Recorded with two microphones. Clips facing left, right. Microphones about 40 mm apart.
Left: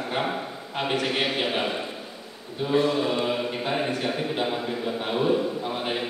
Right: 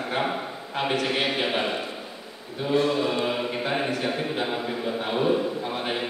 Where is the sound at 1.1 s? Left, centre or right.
Centre.